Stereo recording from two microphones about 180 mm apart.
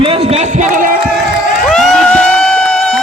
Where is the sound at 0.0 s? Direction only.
35° right (ahead or behind); by 0.9 s 50° right (ahead or behind).